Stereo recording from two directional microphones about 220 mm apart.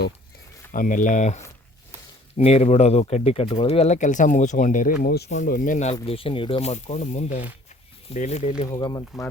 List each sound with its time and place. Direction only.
0.7 s speech: 35° left (ahead or behind)
2.4 s speech: 30° left (ahead or behind)
8.6 s speech: 15° left (ahead or behind)